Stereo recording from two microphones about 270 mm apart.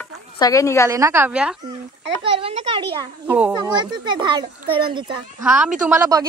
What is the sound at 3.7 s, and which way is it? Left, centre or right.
A child's voice, centre.